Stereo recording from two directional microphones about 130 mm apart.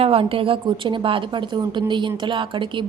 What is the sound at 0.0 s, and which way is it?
A woman's voice, 45° right (ahead or behind).